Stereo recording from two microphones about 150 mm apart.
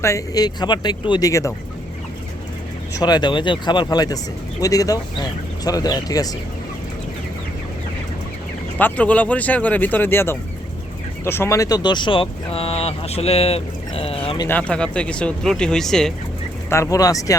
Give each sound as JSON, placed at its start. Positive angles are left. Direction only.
{"t": 0.0, "sound": "speech", "side_deg": 20}
{"t": 2.9, "sound": "speech", "side_deg": 25}
{"t": 8.8, "sound": "speech", "side_deg": 10}
{"t": 14.4, "sound": "speech", "side_deg": 10}
{"t": 16.6, "sound": "speech", "side_deg": 20}